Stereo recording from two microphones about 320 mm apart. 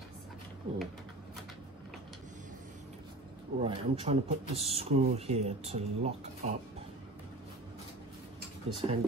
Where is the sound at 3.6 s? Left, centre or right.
Centre.